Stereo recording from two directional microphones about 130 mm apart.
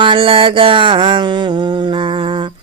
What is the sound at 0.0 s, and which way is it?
Mantra, 40° right (ahead or behind).